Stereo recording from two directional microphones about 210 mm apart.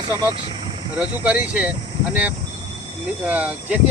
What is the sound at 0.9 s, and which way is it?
Speech, 5° right (ahead or behind).